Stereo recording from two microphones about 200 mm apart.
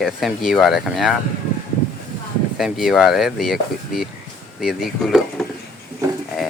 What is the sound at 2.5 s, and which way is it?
Speech, centre (ahead or behind).